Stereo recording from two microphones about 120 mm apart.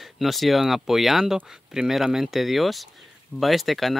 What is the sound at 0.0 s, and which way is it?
Speech, centre (ahead or behind).